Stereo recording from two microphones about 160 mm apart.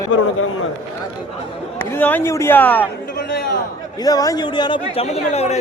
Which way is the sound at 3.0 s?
75° left (ahead or behind).